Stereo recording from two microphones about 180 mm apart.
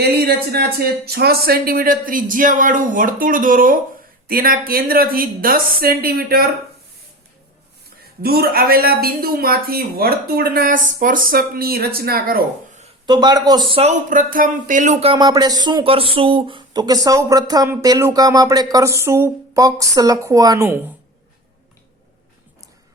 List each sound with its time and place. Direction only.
0.0 s speech: 60° right (ahead or behind)
8.2 s speech: 60° right (ahead or behind)
13.1 s speech: 25° right (ahead or behind)
14.1 s speech: 50° right (ahead or behind)
15.1 s speech: 20° right (ahead or behind)